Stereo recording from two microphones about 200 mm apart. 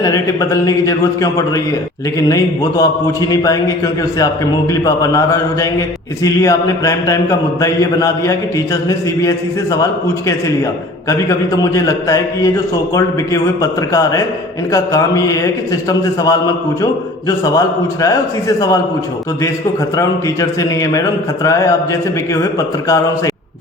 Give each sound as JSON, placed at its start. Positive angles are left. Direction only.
{"t": 0.0, "sound": "mantra", "side_deg": 15}
{"t": 11.1, "sound": "mantra", "side_deg": 15}
{"t": 20.0, "sound": "mantra", "side_deg": 15}